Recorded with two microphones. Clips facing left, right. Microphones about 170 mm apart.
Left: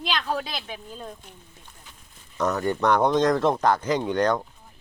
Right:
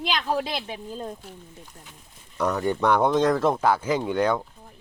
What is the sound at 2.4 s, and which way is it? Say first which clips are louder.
Speech: even; 10° right (ahead or behind).